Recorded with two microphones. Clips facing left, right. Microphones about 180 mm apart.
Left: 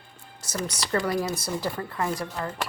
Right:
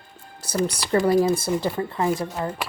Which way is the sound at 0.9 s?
25° right (ahead or behind).